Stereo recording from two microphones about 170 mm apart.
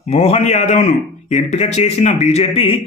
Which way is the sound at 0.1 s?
40° left (ahead or behind).